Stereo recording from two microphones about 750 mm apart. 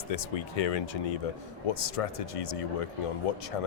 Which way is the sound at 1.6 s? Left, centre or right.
Left.